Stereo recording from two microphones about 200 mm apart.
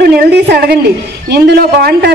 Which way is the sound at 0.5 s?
50° right (ahead or behind).